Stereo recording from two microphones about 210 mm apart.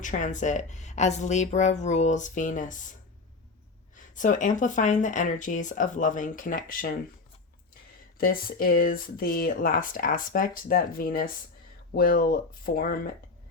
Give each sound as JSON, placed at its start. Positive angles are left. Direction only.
{"t": 0.0, "sound": "speech", "side_deg": 35}
{"t": 3.9, "sound": "speech", "side_deg": 35}
{"t": 8.2, "sound": "speech", "side_deg": 45}